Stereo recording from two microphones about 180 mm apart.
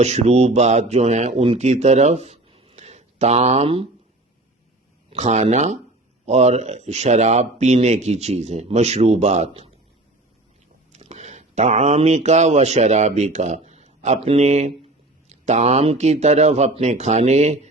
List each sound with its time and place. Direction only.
0.0 s speech: 35° right (ahead or behind)
5.1 s speech: 40° right (ahead or behind)
10.9 s speech: 40° right (ahead or behind)